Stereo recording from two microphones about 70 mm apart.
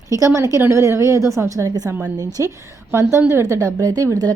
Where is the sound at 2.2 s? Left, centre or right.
Right.